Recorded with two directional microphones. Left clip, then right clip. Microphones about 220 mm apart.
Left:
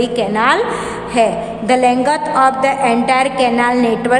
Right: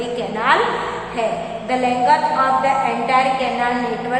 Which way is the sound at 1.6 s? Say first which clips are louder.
Left 4 dB; 50° left (ahead or behind).